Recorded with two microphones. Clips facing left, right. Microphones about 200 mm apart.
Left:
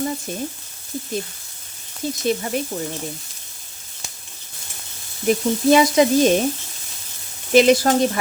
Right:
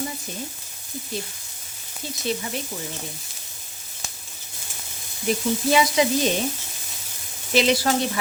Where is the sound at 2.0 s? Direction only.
45° left (ahead or behind).